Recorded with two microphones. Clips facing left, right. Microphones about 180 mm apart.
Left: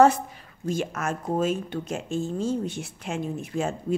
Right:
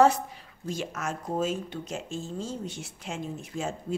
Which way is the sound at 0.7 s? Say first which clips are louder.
Left 5 dB; 55° left (ahead or behind).